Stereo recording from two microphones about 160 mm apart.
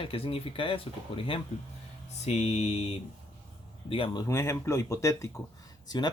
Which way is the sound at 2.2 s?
45° left (ahead or behind).